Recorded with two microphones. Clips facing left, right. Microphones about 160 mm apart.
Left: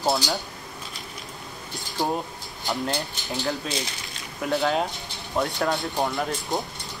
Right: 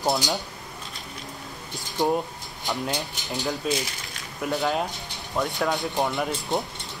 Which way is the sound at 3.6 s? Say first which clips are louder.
Right 3 dB; 5° right (ahead or behind).